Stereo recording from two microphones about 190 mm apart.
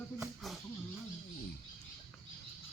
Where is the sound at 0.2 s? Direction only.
Centre (ahead or behind).